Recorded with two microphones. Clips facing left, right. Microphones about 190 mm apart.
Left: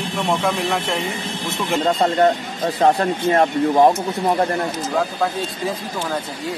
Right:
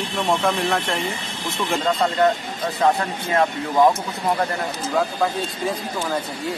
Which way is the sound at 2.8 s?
35° left (ahead or behind).